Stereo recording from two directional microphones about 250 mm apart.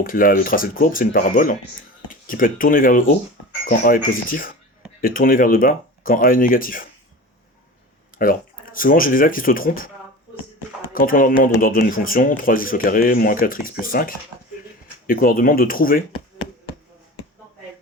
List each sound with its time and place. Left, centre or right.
0.0 s speech: left
8.2 s speech: left
10.9 s speech: left